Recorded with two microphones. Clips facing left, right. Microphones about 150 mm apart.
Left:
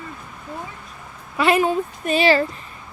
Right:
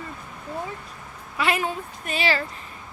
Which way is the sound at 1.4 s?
30° left (ahead or behind).